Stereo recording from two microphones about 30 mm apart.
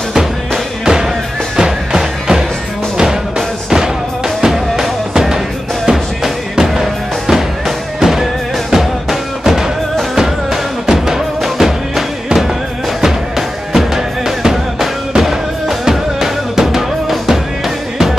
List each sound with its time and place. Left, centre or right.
0.8 s music: right
6.5 s music: centre
13.7 s music: centre
14.4 s drum: centre
15.8 s music: centre